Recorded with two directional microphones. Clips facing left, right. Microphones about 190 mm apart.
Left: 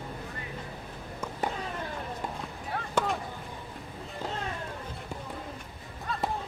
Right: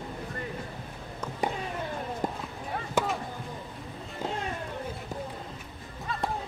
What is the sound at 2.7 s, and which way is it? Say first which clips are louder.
Chop: right 1 dB; 5° right (ahead or behind).